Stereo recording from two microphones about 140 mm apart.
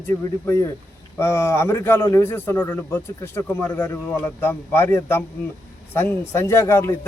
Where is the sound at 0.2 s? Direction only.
20° left (ahead or behind).